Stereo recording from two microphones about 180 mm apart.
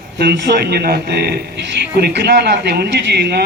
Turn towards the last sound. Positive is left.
turn(degrees=-65)  # may be behind; listen again after turning